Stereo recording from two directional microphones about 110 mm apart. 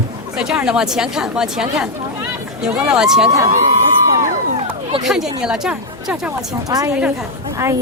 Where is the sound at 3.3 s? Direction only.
30° right (ahead or behind).